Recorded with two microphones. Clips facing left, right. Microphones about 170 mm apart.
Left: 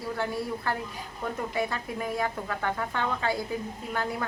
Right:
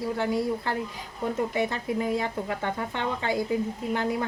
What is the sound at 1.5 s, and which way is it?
Speech, 25° right (ahead or behind).